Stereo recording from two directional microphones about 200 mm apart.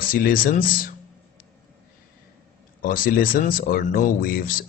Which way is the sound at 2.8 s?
45° left (ahead or behind).